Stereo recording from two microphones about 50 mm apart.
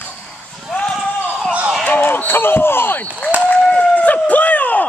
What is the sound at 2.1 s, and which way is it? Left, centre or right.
Basketball bounce, left.